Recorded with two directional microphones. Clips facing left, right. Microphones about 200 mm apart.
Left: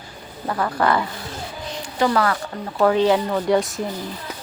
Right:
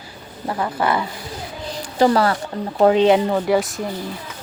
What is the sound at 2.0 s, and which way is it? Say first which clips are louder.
Speech: right 4 dB; 35° right (ahead or behind).